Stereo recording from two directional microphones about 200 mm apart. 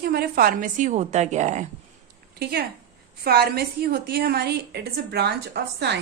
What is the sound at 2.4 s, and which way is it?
A woman's voice, 55° right (ahead or behind).